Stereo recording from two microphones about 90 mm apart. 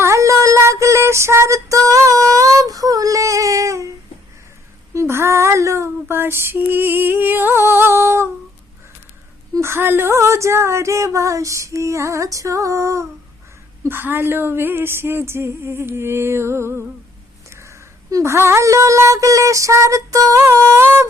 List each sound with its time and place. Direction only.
0.0 s music: 35° right (ahead or behind)
4.9 s a sound: 30° right (ahead or behind)
6.7 s humming: 25° right (ahead or behind)
9.6 s speech: 30° right (ahead or behind)
13.8 s a sound: 25° right (ahead or behind)
17.5 s speech: 35° right (ahead or behind)